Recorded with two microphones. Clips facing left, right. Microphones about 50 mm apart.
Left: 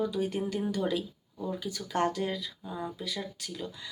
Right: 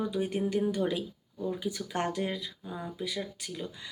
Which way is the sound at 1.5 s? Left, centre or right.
Centre.